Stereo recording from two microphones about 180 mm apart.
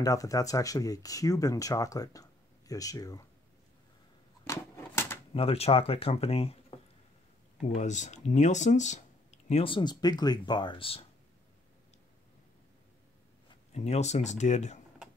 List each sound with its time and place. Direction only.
0.0 s speech: 20° left (ahead or behind)
4.5 s a sound: 15° left (ahead or behind)
5.3 s speech: 30° left (ahead or behind)
7.7 s speech: 40° left (ahead or behind)
13.7 s speech: 40° left (ahead or behind)